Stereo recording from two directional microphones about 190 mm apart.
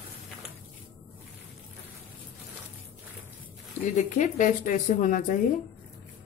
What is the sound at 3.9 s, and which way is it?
A woman's voice, 40° left (ahead or behind).